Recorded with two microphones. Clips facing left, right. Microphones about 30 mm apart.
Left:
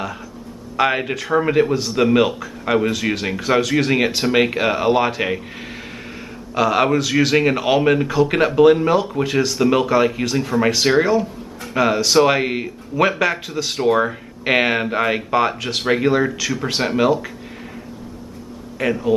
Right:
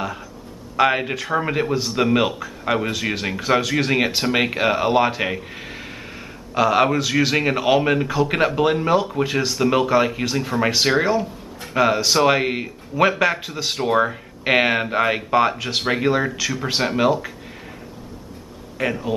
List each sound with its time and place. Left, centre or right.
0.7 s speech: centre
6.5 s speech: centre
18.8 s speech: centre